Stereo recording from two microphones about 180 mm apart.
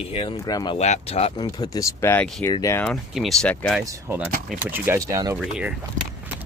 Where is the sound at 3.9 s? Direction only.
15° right (ahead or behind).